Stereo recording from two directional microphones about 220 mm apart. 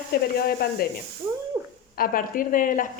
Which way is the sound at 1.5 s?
10° right (ahead or behind).